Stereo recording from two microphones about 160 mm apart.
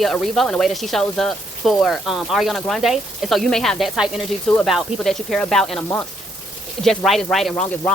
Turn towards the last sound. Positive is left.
turn(degrees=5)  # may be behind; listen again after turning